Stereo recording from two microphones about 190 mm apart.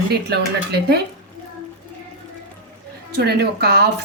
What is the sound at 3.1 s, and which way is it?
Speech, 60° right (ahead or behind).